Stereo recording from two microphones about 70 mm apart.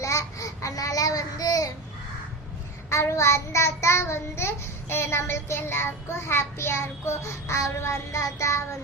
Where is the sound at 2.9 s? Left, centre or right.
Left.